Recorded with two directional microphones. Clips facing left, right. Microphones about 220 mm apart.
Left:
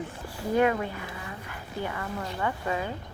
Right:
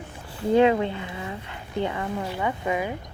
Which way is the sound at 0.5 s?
25° right (ahead or behind).